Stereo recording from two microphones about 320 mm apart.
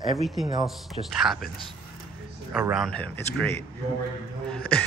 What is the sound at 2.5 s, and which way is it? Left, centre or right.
Speech, centre.